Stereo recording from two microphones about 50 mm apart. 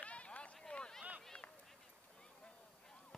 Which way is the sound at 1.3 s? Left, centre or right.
Left.